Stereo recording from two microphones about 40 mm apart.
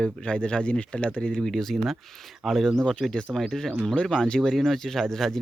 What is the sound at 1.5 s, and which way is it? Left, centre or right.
Speech, centre.